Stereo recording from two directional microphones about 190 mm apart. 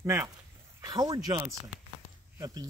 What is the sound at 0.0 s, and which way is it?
Speech, 15° right (ahead or behind).